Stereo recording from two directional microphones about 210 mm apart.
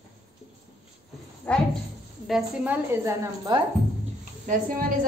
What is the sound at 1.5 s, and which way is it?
A woman's voice, 5° left (ahead or behind).